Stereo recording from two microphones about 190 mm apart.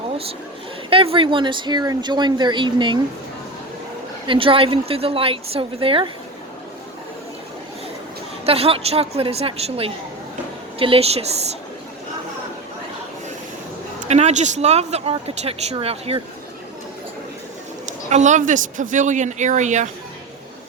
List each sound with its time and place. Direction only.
0.9 s a woman's voice: 30° right (ahead or behind)
4.3 s a woman's voice: 30° right (ahead or behind)
8.4 s speech: 30° right (ahead or behind)
14.1 s speech: 35° right (ahead or behind)
17.8 s speech: 40° right (ahead or behind)